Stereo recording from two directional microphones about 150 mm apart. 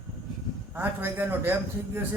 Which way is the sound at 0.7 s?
10° right (ahead or behind).